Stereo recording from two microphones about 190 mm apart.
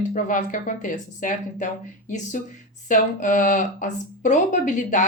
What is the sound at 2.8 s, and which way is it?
Speech, 40° left (ahead or behind).